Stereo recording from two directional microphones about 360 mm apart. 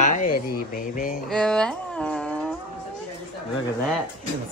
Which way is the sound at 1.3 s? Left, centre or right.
Centre.